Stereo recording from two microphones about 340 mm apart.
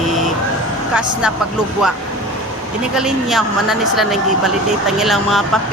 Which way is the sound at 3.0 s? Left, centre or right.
Centre.